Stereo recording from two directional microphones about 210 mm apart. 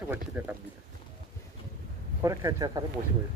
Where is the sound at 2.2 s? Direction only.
15° right (ahead or behind).